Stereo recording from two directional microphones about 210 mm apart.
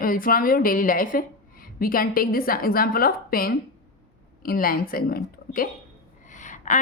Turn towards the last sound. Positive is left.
turn(degrees=35)  # may be behind; listen again after turning